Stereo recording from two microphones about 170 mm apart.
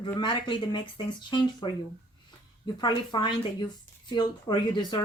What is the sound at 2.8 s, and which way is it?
Speech, 25° left (ahead or behind).